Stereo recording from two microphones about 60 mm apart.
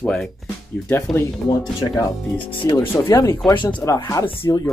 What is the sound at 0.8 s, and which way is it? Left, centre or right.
Speech, left.